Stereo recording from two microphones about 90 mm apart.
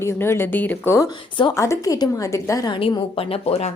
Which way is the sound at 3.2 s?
90° left.